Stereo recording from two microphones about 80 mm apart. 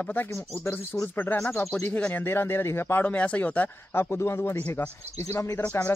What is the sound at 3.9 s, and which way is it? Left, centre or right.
Speech, left.